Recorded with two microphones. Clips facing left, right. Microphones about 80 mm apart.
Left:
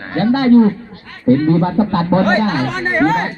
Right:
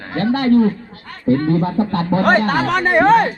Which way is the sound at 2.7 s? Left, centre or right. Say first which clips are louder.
Right 3 dB; right.